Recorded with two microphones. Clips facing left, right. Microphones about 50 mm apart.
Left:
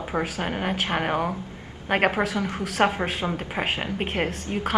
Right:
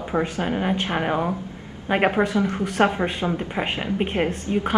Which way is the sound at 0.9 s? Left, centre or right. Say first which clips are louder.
Right 2 dB; centre.